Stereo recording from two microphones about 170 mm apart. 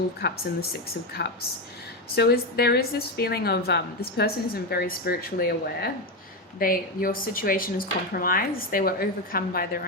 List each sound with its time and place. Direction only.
0.2 s a woman's voice: 70° left (ahead or behind)